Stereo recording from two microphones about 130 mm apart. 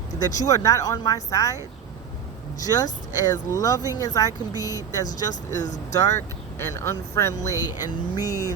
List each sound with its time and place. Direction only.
0.3 s speech: 30° left (ahead or behind)
2.6 s speech: 30° left (ahead or behind)
5.3 s speech: 70° left (ahead or behind)
5.9 s speech: 20° left (ahead or behind)